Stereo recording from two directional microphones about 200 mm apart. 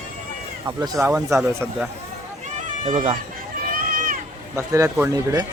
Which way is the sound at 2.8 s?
25° right (ahead or behind).